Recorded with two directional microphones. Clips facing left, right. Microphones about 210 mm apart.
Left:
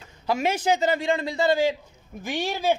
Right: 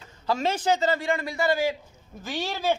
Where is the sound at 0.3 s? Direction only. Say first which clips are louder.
Left 1 dB; 10° left (ahead or behind).